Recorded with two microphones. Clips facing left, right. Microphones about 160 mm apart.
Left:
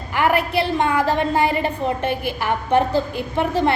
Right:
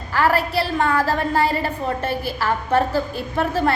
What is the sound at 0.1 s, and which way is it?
A woman's voice, 20° left (ahead or behind).